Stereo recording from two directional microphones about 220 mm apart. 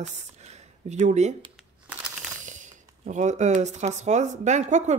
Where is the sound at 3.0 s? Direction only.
35° right (ahead or behind).